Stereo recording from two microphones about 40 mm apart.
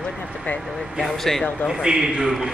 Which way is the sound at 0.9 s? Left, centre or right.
Centre.